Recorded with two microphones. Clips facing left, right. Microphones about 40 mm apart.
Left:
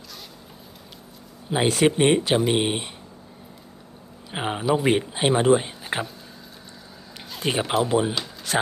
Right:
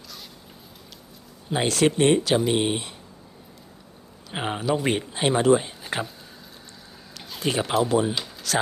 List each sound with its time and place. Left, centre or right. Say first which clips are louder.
1.5 s speech: left 2 dB; centre
4.3 s speech: left 2 dB; centre
7.4 s speech: even; centre